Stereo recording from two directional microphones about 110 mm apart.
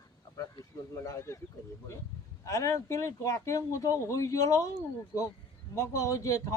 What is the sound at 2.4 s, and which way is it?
Speech, 30° left (ahead or behind).